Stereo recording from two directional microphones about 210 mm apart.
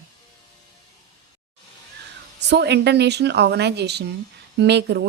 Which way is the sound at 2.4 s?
55° right (ahead or behind).